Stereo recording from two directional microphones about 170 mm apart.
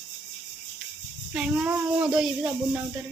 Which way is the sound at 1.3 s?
5° right (ahead or behind).